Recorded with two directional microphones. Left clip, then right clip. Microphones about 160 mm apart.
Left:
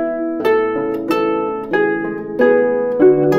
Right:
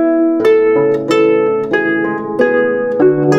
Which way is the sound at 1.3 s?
30° right (ahead or behind).